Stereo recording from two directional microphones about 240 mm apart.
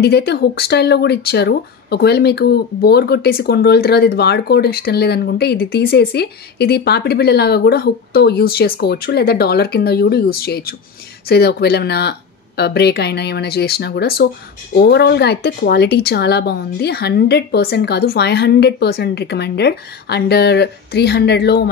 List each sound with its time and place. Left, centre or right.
0.0 s speech: left